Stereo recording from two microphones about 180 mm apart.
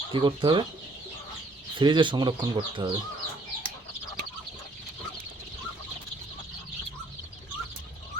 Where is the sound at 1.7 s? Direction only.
25° right (ahead or behind).